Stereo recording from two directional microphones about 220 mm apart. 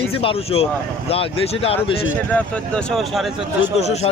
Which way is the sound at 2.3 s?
5° left (ahead or behind).